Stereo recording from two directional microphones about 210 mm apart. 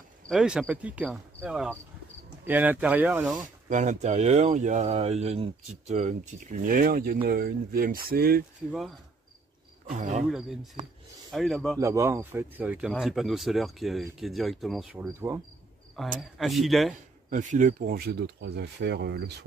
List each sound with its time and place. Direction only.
0.3 s speech: centre (ahead or behind)
3.4 s speech: 35° right (ahead or behind)
9.8 s speech: 35° right (ahead or behind)
10.2 s speech: centre (ahead or behind)
11.8 s speech: 15° right (ahead or behind)
16.0 s speech: centre (ahead or behind)
17.3 s speech: 35° right (ahead or behind); by 19.3 s 50° right (ahead or behind)